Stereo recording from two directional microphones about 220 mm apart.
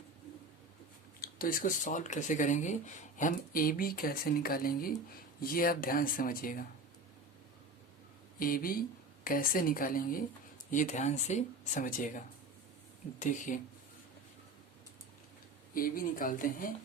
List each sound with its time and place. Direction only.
1.2 s speech: 40° left (ahead or behind)
8.4 s speech: 40° left (ahead or behind)
15.7 s speech: 40° left (ahead or behind)